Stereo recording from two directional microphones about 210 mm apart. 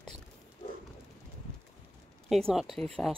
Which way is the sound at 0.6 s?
30° left (ahead or behind).